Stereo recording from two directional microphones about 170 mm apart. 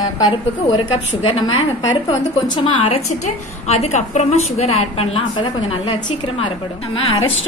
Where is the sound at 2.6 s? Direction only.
35° left (ahead or behind).